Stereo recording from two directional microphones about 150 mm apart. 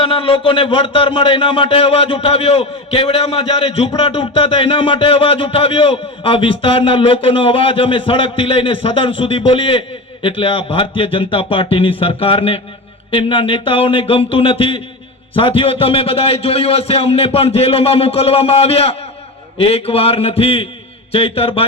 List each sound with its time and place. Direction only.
0.0 s a man's voice: 35° left (ahead or behind)